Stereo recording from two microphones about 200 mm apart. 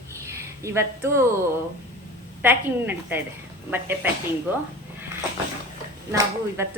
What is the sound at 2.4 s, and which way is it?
Speech, 10° right (ahead or behind).